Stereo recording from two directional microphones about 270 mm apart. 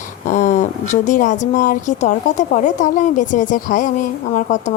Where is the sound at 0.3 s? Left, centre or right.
Left.